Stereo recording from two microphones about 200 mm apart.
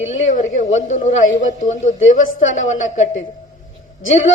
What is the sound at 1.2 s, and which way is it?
Speech, 75° left (ahead or behind).